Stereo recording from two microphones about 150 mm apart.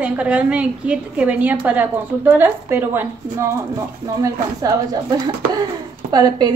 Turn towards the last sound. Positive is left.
turn(degrees=-25)  # may be behind; listen again after turning